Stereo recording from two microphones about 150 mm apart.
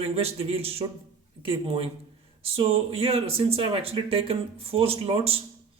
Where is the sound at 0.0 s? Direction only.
40° right (ahead or behind).